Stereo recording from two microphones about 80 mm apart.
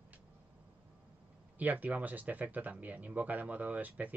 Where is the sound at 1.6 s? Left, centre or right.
Centre.